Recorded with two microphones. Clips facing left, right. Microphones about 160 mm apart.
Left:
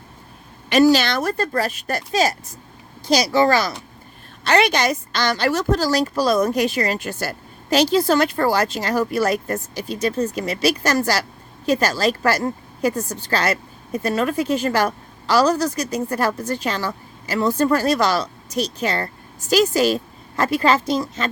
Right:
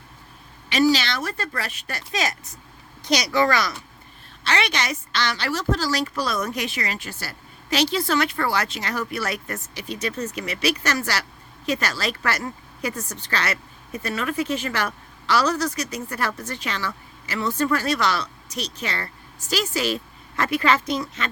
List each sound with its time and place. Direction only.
0.7 s speech: 50° left (ahead or behind); by 3.8 s 30° left (ahead or behind)
4.4 s speech: 45° left (ahead or behind)